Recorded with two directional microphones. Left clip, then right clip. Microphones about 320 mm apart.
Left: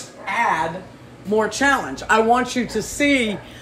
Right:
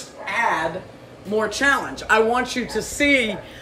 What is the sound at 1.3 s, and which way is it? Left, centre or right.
Speech, centre.